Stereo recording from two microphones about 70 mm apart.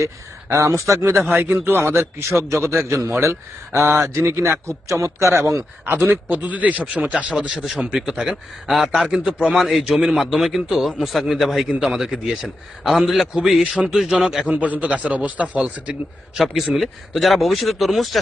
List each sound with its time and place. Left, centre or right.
0.0 s speech: right
1.3 s speech: right
5.9 s speech: right
7.5 s a man's voice: centre
14.4 s speech: right
16.3 s a man's voice: centre